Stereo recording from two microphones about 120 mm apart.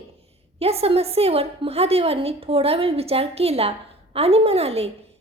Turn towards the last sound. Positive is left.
turn(degrees=-55)  # may be behind; listen again after turning